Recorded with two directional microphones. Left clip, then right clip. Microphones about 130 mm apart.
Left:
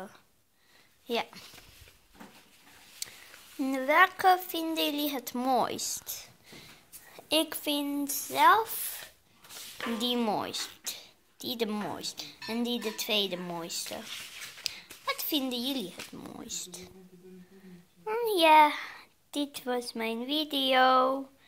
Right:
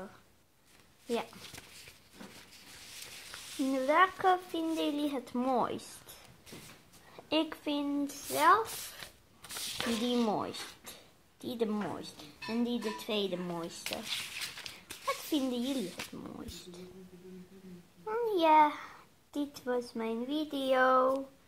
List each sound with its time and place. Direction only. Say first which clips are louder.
1.0 s speech: left 3 dB; 20° left (ahead or behind)
3.6 s speech: left 3 dB; 20° left (ahead or behind)
7.2 s speech: left 4 dB; 15° left (ahead or behind)
10.0 s speech: left 4 dB; 10° left (ahead or behind)
12.4 s speech: left 2 dB; 20° left (ahead or behind)
14.1 s speech: right 4 dB; 50° right (ahead or behind)
14.6 s a sound: left 5 dB; 5° left (ahead or behind)
16.1 s speech: left 3 dB; 25° left (ahead or behind)
18.2 s a child's voice: left 4 dB; 20° left (ahead or behind)
19.6 s speech: even; 30° left (ahead or behind)